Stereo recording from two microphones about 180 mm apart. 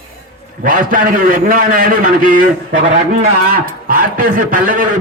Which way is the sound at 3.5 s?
55° right (ahead or behind).